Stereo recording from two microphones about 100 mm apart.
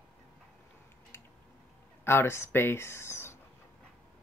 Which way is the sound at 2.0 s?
25° left (ahead or behind).